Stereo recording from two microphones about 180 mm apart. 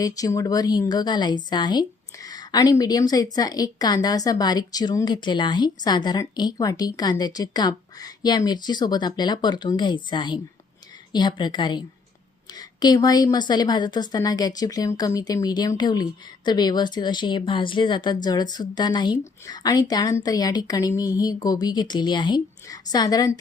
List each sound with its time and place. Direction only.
0.0 s a woman's voice: 20° left (ahead or behind)